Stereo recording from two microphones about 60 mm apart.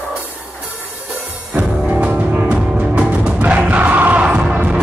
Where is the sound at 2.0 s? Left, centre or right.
Right.